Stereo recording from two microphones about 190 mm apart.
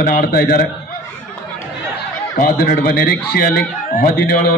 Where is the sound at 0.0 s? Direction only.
50° left (ahead or behind).